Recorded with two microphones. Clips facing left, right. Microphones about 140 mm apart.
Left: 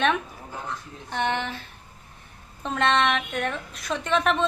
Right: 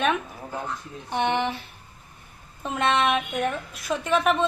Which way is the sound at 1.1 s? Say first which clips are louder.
Right 3 dB; 15° right (ahead or behind).